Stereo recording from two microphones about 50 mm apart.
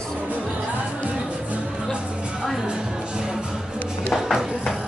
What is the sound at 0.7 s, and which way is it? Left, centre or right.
Music, right.